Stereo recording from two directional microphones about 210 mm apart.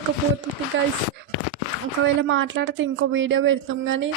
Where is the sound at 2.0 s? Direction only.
65° right (ahead or behind).